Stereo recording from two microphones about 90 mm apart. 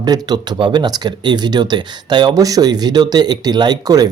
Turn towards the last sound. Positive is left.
turn(degrees=-45)  # may be behind; listen again after turning